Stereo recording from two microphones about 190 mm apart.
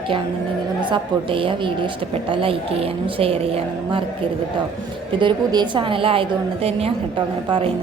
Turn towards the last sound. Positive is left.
turn(degrees=-25)  # may be behind; listen again after turning